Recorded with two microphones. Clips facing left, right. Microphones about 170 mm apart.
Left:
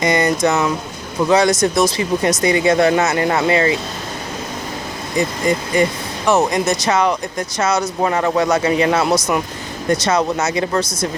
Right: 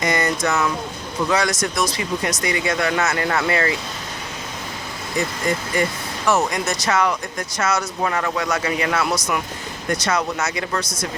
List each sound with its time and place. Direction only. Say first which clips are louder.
0.0 s speech: left 5 dB; 20° left (ahead or behind)
5.1 s speech: left 5 dB; 20° left (ahead or behind)